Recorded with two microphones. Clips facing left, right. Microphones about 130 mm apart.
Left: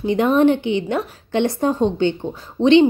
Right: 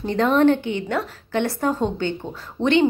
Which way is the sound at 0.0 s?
15° left (ahead or behind).